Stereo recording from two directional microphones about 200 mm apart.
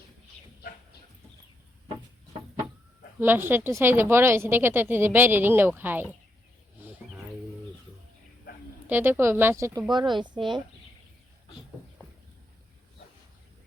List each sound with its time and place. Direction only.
3.2 s speech: 10° right (ahead or behind)
8.9 s speech: 10° right (ahead or behind)